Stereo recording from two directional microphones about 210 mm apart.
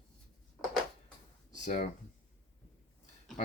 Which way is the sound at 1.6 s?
35° left (ahead or behind).